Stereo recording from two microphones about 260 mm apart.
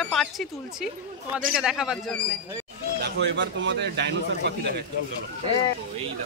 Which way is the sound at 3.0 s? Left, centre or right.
Right.